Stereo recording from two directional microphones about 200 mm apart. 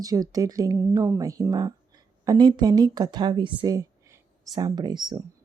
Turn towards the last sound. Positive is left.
turn(degrees=-20)  # may be behind; listen again after turning